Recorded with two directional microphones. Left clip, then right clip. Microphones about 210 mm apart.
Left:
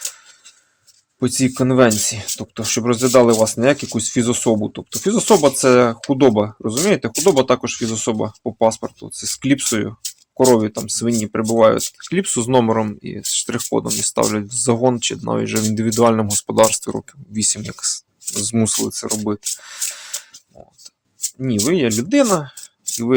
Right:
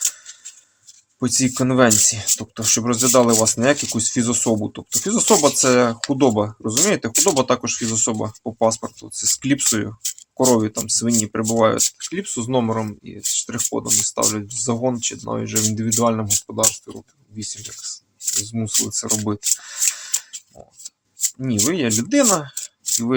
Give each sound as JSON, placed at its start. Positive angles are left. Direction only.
{"t": 1.2, "sound": "speech", "side_deg": 20}
{"t": 16.5, "sound": "speech", "side_deg": 55}
{"t": 19.3, "sound": "speech", "side_deg": 20}
{"t": 21.4, "sound": "speech", "side_deg": 20}